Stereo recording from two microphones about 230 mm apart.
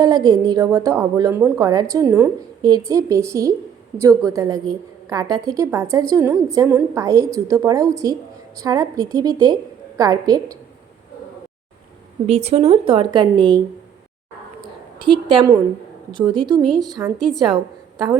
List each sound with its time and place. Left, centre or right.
0.0 s a woman's voice: centre
12.3 s speech: right
14.6 s a sound: right
16.1 s speech: centre
16.6 s a woman's voice: centre
17.9 s a woman's voice: centre